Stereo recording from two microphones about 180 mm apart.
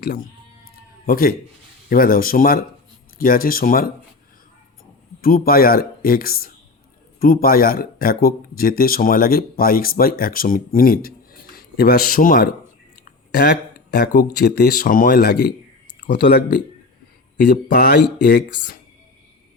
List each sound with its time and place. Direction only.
1.0 s speech: 55° left (ahead or behind)
5.2 s speech: 55° left (ahead or behind)
13.1 s a sound: 65° left (ahead or behind)
14.3 s speech: 60° left (ahead or behind)